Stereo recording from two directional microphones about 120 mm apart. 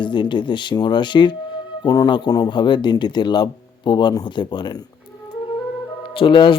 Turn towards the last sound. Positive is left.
turn(degrees=45)  # may be behind; listen again after turning